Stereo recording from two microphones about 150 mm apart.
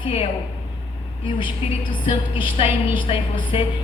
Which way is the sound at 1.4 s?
35° left (ahead or behind).